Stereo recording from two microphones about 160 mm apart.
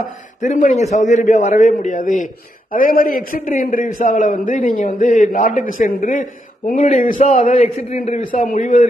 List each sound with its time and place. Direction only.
0.4 s a man's voice: 50° left (ahead or behind)